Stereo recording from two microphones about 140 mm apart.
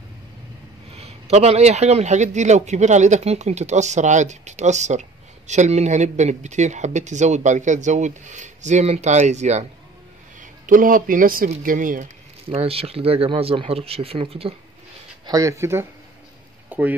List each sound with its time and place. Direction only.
0.9 s speech: 45° right (ahead or behind)
10.4 s speech: 75° right (ahead or behind)
12.4 s speech: 45° right (ahead or behind)
15.2 s speech: 25° right (ahead or behind)
16.6 s a sound: 10° right (ahead or behind)